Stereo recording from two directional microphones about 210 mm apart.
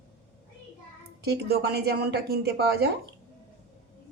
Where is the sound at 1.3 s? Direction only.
50° right (ahead or behind).